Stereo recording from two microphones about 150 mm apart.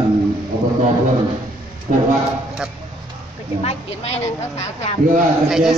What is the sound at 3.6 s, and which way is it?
A woman's voice, 45° left (ahead or behind).